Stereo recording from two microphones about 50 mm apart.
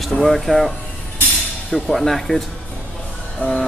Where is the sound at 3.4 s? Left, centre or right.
Left.